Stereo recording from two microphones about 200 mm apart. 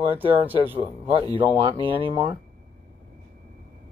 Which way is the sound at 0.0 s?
25° right (ahead or behind).